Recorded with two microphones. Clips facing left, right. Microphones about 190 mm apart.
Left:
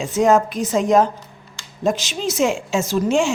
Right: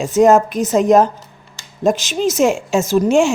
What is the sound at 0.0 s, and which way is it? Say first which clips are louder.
Speech: right 5 dB; 45° right (ahead or behind).